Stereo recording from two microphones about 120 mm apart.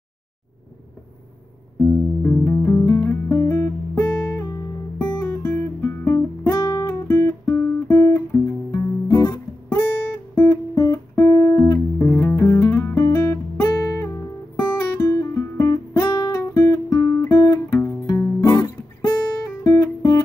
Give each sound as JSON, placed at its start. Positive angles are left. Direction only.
{"t": 1.8, "sound": "music", "side_deg": 10}
{"t": 2.6, "sound": "music", "side_deg": 25}
{"t": 3.3, "sound": "guitar", "side_deg": 25}
{"t": 8.3, "sound": "music", "side_deg": 20}
{"t": 8.7, "sound": "guitar", "side_deg": 30}
{"t": 12.1, "sound": "music", "side_deg": 15}
{"t": 19.6, "sound": "guitar", "side_deg": 25}